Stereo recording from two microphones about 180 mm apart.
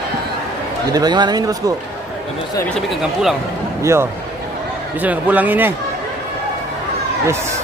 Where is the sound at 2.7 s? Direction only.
Centre (ahead or behind).